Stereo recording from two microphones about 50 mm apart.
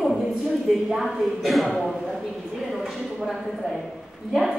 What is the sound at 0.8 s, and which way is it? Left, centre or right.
Speech, centre.